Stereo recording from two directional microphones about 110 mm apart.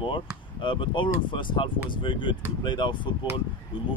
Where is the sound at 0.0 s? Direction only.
50° left (ahead or behind).